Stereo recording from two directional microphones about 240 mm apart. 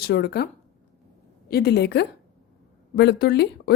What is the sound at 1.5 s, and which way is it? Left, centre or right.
A woman's voice, left.